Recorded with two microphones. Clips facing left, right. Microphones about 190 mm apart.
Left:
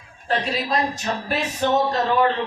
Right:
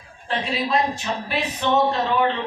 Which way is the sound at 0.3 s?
40° left (ahead or behind).